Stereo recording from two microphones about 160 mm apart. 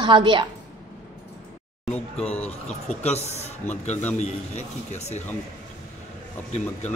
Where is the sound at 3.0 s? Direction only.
40° left (ahead or behind).